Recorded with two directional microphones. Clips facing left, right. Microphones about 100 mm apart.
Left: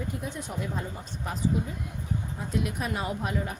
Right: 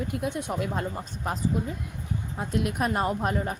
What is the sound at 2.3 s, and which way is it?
A woman's voice, 55° right (ahead or behind).